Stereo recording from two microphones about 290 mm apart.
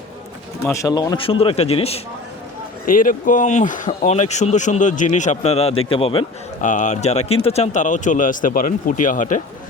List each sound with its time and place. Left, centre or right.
0.6 s a man's voice: centre; by 9.4 s left